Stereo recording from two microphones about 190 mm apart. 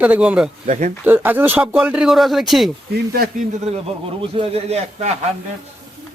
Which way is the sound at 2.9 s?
55° right (ahead or behind).